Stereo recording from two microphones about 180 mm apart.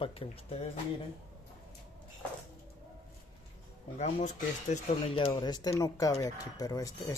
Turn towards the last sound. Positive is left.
turn(degrees=20)  # may be behind; listen again after turning